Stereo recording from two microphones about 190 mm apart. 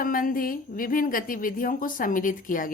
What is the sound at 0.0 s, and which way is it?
A woman's voice, 45° left (ahead or behind).